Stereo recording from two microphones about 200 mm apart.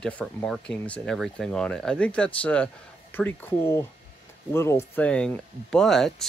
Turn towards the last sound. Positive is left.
turn(degrees=0)  # may be behind; listen again after turning